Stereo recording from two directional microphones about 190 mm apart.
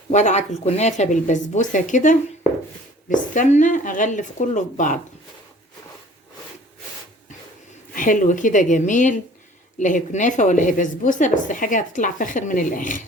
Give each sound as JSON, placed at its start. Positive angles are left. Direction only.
{"t": 0.1, "sound": "speech", "side_deg": 40}
{"t": 7.9, "sound": "a woman's voice", "side_deg": 45}